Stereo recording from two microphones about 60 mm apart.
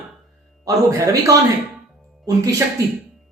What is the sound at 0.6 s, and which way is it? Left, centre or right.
Speech, right.